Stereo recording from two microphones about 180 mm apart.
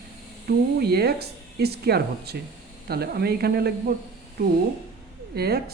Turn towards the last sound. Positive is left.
turn(degrees=-60)  # may be behind; listen again after turning